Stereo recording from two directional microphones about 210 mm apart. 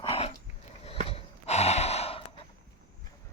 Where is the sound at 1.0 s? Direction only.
30° left (ahead or behind).